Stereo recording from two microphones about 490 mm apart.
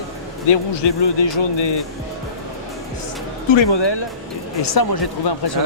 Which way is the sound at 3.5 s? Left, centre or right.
Left.